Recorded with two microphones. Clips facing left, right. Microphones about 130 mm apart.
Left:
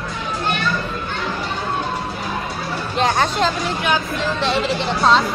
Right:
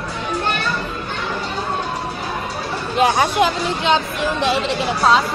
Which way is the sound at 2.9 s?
10° right (ahead or behind).